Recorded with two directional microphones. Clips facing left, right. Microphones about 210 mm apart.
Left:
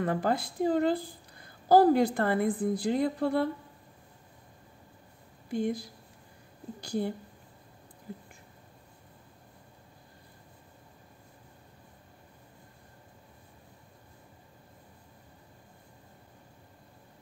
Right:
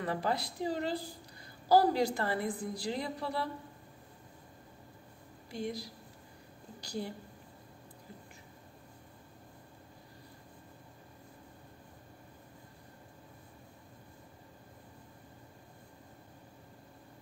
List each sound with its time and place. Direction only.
0.0 s a woman's voice: 50° left (ahead or behind)
5.5 s a woman's voice: 50° left (ahead or behind)